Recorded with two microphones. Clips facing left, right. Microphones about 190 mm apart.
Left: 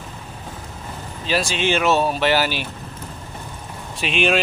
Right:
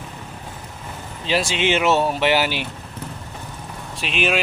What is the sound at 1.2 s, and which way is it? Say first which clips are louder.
Speech: right 1 dB; 20° right (ahead or behind).